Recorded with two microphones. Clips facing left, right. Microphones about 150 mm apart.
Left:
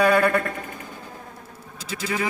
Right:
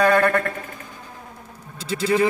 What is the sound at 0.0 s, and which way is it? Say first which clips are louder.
Speech: right 1 dB; 10° left (ahead or behind).